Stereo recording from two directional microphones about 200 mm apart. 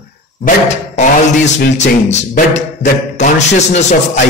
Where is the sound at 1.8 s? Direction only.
35° left (ahead or behind).